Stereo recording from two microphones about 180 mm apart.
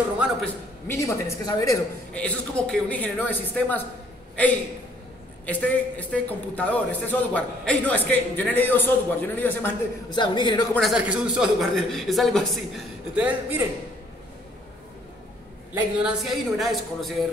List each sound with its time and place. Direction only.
0.8 s a man's voice: 15° left (ahead or behind)
2.1 s a man's voice: 5° left (ahead or behind)
5.4 s a man's voice: 10° left (ahead or behind)
10.1 s a man's voice: 25° left (ahead or behind)
10.7 s a man's voice: centre (ahead or behind)
15.7 s a man's voice: 5° right (ahead or behind)